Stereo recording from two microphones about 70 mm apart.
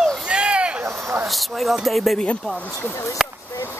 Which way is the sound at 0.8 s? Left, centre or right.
Right.